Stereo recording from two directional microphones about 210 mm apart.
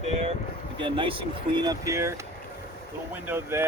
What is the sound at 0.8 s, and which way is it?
Speech, 25° right (ahead or behind).